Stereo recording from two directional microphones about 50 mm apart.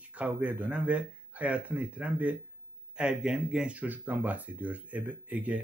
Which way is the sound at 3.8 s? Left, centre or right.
Right.